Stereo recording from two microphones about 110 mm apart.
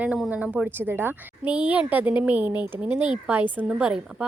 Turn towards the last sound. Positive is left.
turn(degrees=-10)  # may be behind; listen again after turning